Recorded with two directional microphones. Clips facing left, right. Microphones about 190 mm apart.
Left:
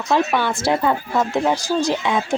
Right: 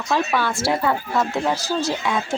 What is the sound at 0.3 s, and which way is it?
Speech, 20° left (ahead or behind).